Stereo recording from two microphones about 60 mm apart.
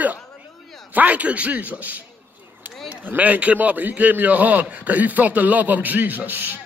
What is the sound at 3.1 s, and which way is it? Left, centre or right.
A man's voice, right.